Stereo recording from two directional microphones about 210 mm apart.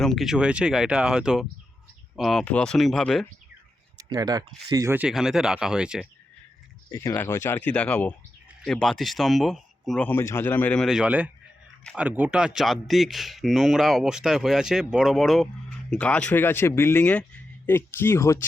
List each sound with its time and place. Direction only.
0.0 s speech: centre (ahead or behind)
3.9 s speech: 20° right (ahead or behind)
6.9 s a man's voice: 10° left (ahead or behind)